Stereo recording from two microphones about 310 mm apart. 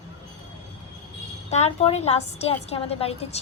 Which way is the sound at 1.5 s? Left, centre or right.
Left.